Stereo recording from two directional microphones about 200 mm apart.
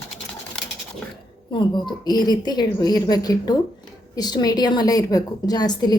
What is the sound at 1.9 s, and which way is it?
A woman's voice, 20° left (ahead or behind).